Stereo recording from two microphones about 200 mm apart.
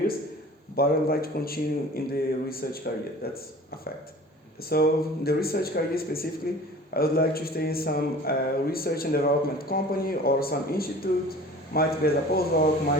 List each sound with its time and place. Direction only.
0.8 s speech: 50° left (ahead or behind)
4.7 s speech: 50° left (ahead or behind)